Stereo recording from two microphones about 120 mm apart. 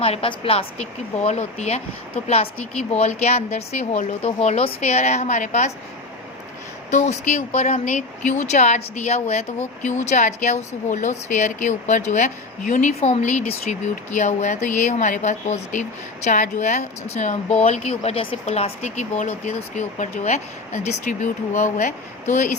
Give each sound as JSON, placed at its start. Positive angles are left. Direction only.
{"t": 0.0, "sound": "speech", "side_deg": 55}
{"t": 6.9, "sound": "speech", "side_deg": 70}
{"t": 9.8, "sound": "a woman's voice", "side_deg": 85}
{"t": 17.6, "sound": "speech", "side_deg": 65}
{"t": 18.4, "sound": "a woman's voice", "side_deg": 65}